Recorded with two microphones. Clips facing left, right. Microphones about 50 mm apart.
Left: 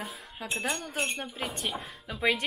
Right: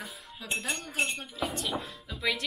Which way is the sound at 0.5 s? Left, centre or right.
Left.